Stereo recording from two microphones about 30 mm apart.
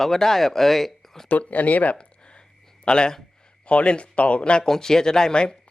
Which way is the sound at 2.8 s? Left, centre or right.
Left.